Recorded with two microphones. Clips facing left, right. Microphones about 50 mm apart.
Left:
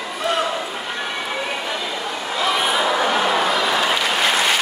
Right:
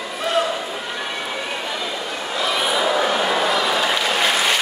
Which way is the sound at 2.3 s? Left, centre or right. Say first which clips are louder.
Left 1 dB; centre.